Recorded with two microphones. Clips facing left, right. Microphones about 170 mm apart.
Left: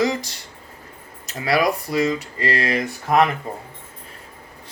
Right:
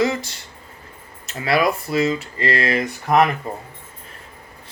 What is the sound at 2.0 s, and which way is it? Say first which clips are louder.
Speech: right 1 dB; 30° right (ahead or behind).